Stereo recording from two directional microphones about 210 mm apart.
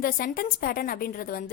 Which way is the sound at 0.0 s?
45° left (ahead or behind).